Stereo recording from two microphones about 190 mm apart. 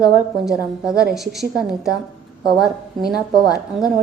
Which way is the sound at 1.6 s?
5° right (ahead or behind).